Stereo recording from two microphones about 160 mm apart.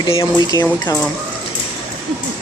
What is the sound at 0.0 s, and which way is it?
Speech, 30° left (ahead or behind).